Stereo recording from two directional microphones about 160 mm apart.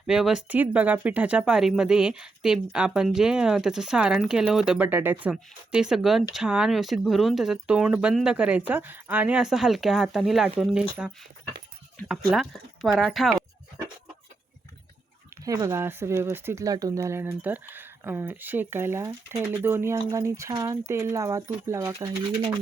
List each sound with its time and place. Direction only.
0.1 s speech: 5° right (ahead or behind)
15.4 s speech: 20° right (ahead or behind)